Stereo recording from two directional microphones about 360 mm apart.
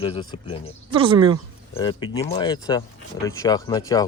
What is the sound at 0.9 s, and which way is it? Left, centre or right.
Speech, centre.